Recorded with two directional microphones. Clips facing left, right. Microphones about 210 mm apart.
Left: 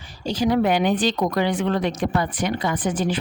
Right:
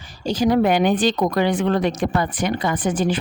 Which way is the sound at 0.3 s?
45° right (ahead or behind).